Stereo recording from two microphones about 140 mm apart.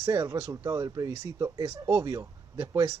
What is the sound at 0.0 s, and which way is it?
Speech, 25° right (ahead or behind).